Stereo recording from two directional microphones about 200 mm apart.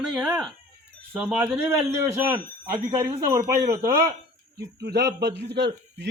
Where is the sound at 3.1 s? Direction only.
20° right (ahead or behind).